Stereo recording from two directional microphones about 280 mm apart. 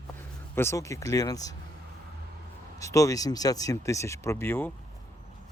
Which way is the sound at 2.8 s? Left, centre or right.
Centre.